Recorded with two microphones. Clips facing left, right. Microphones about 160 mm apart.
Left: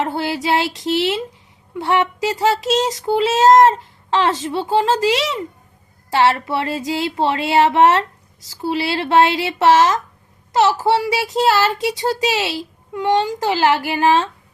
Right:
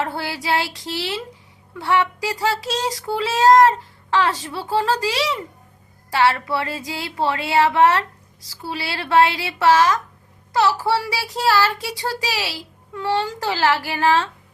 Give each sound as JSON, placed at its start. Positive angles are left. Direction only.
{"t": 0.0, "sound": "child singing", "side_deg": 20}